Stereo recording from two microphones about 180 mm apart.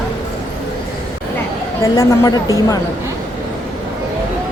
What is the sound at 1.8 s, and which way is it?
A woman's voice, 15° left (ahead or behind).